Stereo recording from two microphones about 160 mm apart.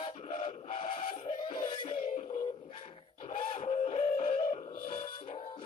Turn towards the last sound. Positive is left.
turn(degrees=35)  # may be behind; listen again after turning